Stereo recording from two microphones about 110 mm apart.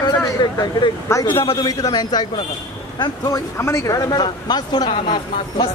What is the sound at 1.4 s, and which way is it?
Speech, 35° left (ahead or behind).